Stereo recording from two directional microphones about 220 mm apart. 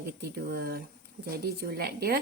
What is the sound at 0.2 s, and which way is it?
Speech, 45° right (ahead or behind).